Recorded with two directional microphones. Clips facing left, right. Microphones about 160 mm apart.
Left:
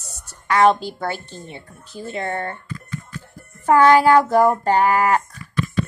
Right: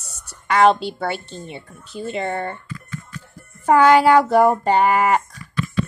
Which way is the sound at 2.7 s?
35° left (ahead or behind).